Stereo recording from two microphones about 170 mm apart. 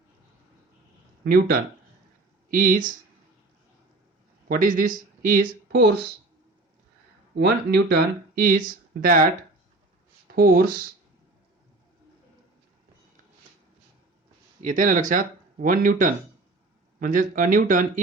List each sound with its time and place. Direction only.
1.2 s speech: 60° right (ahead or behind)
4.4 s speech: 55° right (ahead or behind)
7.3 s speech: 70° right (ahead or behind)
10.3 s speech: 60° right (ahead or behind)
14.6 s speech: 50° right (ahead or behind)